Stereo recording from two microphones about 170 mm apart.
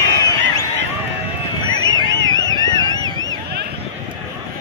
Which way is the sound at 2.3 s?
25° left (ahead or behind).